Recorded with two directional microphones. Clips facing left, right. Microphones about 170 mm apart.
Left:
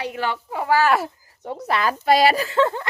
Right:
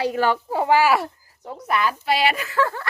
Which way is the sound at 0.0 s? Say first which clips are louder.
Right 5 dB; 40° right (ahead or behind).